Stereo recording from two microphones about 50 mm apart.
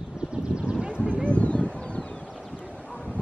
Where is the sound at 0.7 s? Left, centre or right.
Centre.